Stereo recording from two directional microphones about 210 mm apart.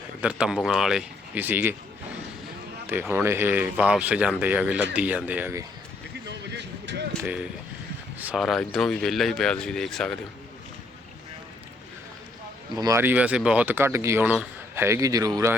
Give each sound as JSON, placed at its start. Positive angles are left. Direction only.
{"t": 0.2, "sound": "speech", "side_deg": -5}
{"t": 2.8, "sound": "speech", "side_deg": -10}
{"t": 6.2, "sound": "vehicle", "side_deg": -55}
{"t": 8.2, "sound": "speech", "side_deg": -5}
{"t": 12.7, "sound": "speech", "side_deg": -15}